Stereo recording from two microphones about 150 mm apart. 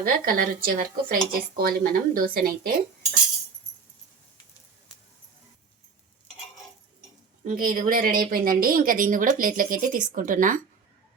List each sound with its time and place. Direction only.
0.0 s a woman's voice: 75° right (ahead or behind)
7.4 s a woman's voice: 70° right (ahead or behind)